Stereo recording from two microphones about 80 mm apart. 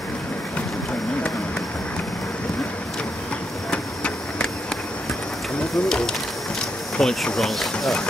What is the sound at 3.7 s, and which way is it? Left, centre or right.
Vehicle, centre.